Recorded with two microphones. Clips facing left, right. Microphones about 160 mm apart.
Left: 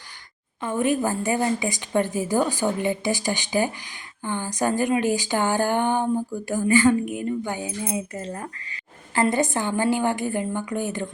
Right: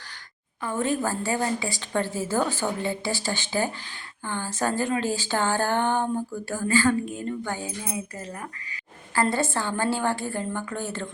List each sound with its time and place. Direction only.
0.6 s a woman's voice: 15° left (ahead or behind)
9.2 s a woman's voice: 15° left (ahead or behind)